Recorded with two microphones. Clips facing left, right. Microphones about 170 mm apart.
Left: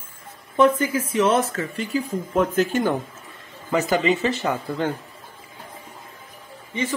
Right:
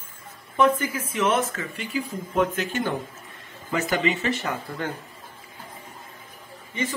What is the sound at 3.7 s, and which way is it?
Speech, 35° left (ahead or behind).